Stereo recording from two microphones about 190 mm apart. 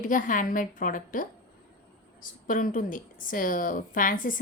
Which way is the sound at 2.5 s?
45° left (ahead or behind).